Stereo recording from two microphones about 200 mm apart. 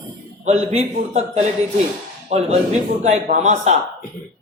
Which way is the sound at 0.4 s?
30° right (ahead or behind).